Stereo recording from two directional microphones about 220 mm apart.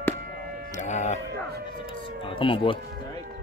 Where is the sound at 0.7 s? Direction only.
30° left (ahead or behind).